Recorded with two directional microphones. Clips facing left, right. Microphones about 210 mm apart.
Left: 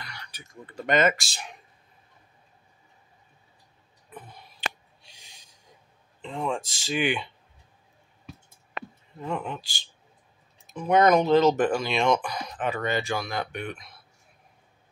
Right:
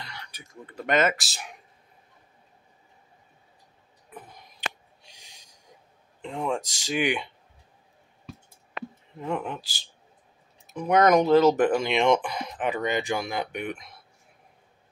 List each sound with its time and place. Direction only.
0.3 s speech: 5° right (ahead or behind)
4.1 s a sound: 15° right (ahead or behind)
6.2 s speech: 15° right (ahead or behind)
9.2 s speech: 10° right (ahead or behind)